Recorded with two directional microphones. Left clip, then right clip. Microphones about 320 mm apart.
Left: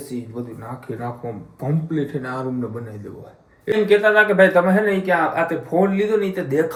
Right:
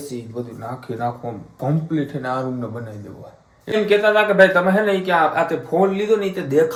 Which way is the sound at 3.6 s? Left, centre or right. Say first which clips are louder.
Left 1 dB; centre.